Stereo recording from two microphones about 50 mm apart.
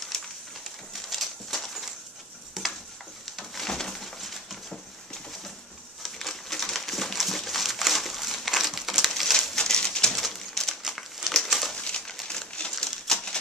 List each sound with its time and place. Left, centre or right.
0.1 s a sound: centre
2.6 s stir: centre
3.3 s a sound: centre
6.0 s crumpling: centre
9.1 s a sound: centre
9.6 s bird: centre
10.2 s bird: centre
11.0 s crumpling: centre
11.7 s crumpling: centre
13.0 s bird: centre